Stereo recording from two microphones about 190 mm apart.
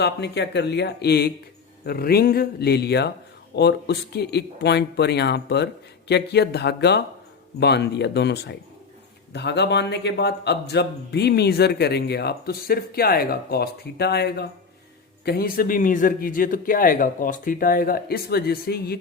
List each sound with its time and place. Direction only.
0.0 s a man's voice: 65° left (ahead or behind)